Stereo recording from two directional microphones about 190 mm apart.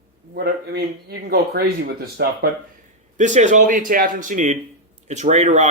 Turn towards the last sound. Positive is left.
turn(degrees=-35)  # may be behind; listen again after turning